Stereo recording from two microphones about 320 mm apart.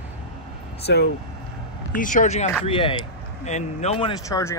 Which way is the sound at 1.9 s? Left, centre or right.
Left.